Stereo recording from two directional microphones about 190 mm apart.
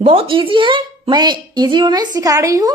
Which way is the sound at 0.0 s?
30° right (ahead or behind).